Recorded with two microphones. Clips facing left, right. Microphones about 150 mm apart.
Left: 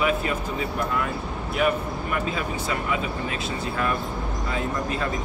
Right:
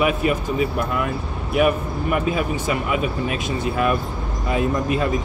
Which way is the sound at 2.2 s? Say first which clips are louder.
Right 6 dB; 15° right (ahead or behind).